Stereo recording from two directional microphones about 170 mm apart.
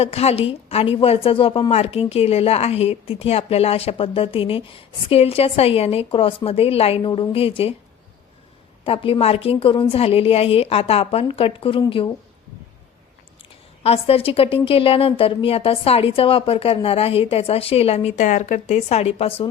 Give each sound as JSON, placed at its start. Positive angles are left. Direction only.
{"t": 0.0, "sound": "a woman's voice", "side_deg": 35}
{"t": 8.8, "sound": "a woman's voice", "side_deg": 30}
{"t": 13.8, "sound": "a woman's voice", "side_deg": 35}